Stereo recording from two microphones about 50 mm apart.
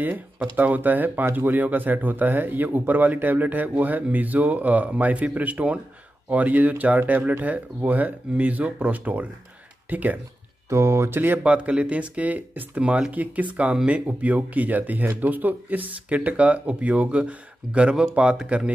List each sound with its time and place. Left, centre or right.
0.6 s speech: right
10.7 s speech: right
11.1 s speech: right
11.4 s speech: right